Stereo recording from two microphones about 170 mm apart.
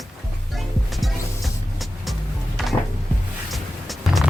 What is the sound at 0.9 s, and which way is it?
Music, centre (ahead or behind).